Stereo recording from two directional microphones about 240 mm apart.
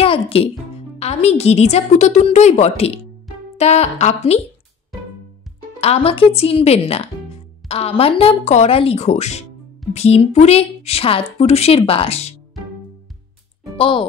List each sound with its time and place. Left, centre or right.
0.0 s a woman's voice: left
5.8 s a woman's voice: left
13.7 s speech: left